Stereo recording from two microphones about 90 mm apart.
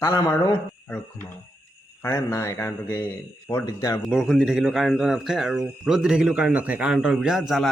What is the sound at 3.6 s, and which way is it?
Speech, 40° left (ahead or behind).